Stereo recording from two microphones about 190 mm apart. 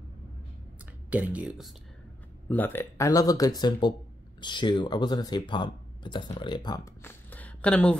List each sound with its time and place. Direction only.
1.1 s speech: 5° right (ahead or behind)
2.5 s speech: 10° left (ahead or behind)